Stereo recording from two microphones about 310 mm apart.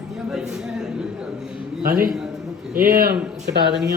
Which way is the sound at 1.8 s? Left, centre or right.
Right.